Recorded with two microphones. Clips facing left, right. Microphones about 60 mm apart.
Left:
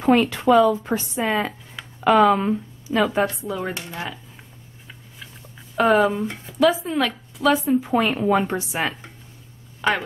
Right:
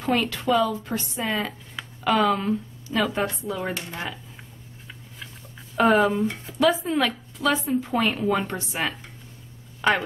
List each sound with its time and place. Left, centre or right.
0.1 s speech: centre
0.7 s speech: left
1.1 s speech: centre
3.3 s speech: centre
5.8 s speech: centre
9.8 s speech: centre